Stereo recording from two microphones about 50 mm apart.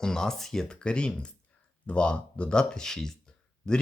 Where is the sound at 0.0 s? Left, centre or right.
Centre.